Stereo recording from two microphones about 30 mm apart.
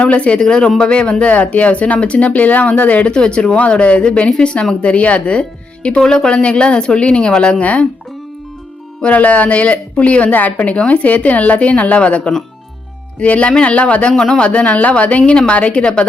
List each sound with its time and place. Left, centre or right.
0.0 s speech: left
0.3 s speech: left
0.9 s speech: left
1.3 s speech: left
3.1 s speech: left
4.8 s speech: left
6.0 s speech: left
6.3 s speech: left
9.0 s speech: left
10.2 s a woman's voice: left
10.6 s speech: left
14.2 s speech: left